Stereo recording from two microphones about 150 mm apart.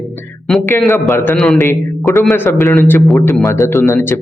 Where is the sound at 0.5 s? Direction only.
Centre (ahead or behind).